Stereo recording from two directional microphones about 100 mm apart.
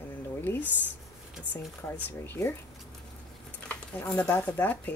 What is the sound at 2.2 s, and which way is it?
Speech, 25° left (ahead or behind).